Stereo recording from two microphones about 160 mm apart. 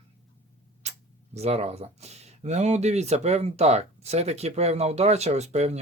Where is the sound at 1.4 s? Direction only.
40° right (ahead or behind).